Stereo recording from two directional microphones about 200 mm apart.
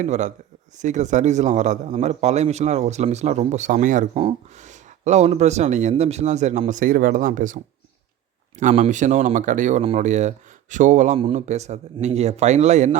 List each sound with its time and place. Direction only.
0.0 s a man's voice: 35° right (ahead or behind)